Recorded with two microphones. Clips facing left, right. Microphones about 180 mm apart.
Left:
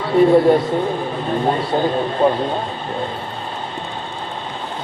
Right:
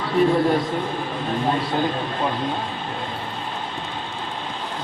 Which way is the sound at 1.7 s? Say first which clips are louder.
Left 6 dB; 35° left (ahead or behind).